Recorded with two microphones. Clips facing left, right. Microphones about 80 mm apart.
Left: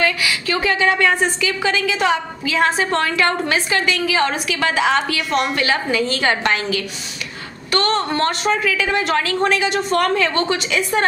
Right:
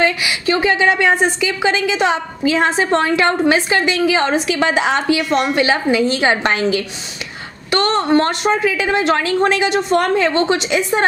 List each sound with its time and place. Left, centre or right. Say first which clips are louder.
0.0 s a woman's voice: right 3 dB; right